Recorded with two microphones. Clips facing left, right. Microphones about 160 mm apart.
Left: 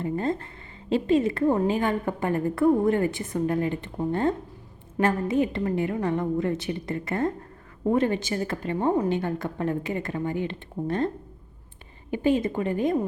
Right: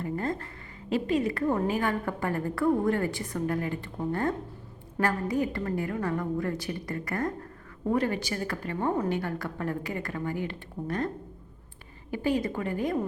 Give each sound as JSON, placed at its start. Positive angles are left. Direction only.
{"t": 0.0, "sound": "a woman's voice", "side_deg": 20}
{"t": 12.1, "sound": "a woman's voice", "side_deg": 20}